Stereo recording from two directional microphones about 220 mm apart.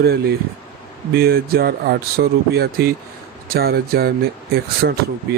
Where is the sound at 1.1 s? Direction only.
45° right (ahead or behind).